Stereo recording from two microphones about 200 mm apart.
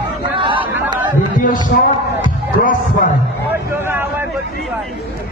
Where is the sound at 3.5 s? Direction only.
10° right (ahead or behind).